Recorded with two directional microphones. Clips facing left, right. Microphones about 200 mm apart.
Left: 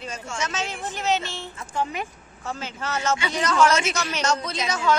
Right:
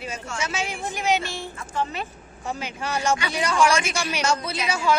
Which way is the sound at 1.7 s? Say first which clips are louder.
Left 1 dB; 15° left (ahead or behind).